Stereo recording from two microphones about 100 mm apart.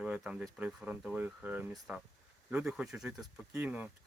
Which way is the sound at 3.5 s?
15° right (ahead or behind).